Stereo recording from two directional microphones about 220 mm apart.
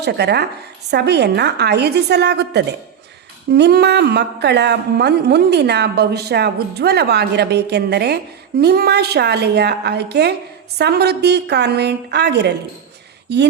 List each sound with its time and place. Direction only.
0.0 s a woman's voice: 50° right (ahead or behind)